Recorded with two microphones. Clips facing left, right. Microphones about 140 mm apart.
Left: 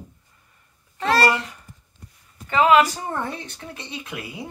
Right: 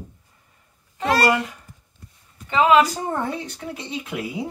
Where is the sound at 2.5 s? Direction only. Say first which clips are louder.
Even; 20° right (ahead or behind).